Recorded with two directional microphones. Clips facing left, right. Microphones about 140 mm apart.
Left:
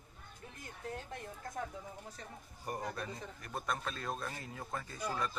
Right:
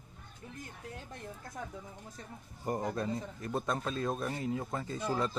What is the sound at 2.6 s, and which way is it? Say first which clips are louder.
Speech: right 6 dB; 25° right (ahead or behind).